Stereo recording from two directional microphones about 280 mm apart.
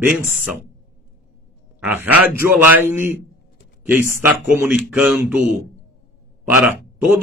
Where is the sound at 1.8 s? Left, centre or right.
Centre.